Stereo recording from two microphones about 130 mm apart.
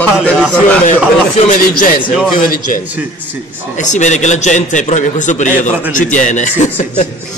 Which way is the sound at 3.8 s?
70° left (ahead or behind).